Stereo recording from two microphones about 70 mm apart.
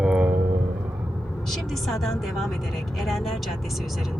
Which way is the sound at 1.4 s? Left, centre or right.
Centre.